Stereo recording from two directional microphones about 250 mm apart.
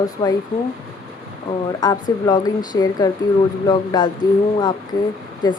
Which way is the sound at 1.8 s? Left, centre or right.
Centre.